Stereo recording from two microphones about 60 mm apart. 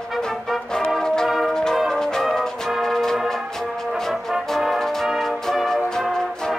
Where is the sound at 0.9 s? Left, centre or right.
Centre.